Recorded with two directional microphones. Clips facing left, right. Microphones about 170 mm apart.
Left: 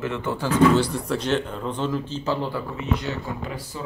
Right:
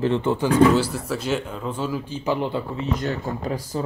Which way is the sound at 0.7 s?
5° right (ahead or behind).